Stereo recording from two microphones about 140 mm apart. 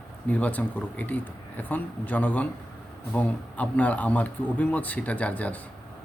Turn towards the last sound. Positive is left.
turn(degrees=10)  # may be behind; listen again after turning